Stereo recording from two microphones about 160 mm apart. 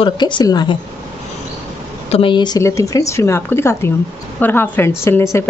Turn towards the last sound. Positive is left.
turn(degrees=15)  # may be behind; listen again after turning